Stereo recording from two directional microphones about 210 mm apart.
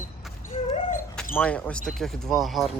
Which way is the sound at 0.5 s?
25° left (ahead or behind).